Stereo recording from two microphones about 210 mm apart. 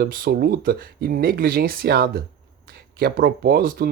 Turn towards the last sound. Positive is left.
turn(degrees=-45)  # may be behind; listen again after turning